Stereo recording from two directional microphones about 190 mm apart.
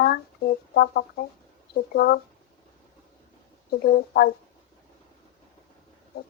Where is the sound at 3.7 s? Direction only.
55° left (ahead or behind).